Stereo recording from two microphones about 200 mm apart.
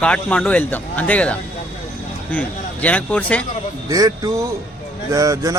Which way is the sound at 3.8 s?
15° right (ahead or behind).